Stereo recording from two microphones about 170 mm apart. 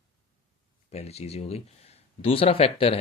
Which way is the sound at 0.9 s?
40° left (ahead or behind).